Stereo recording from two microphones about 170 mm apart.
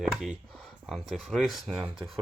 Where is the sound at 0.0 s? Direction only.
5° right (ahead or behind).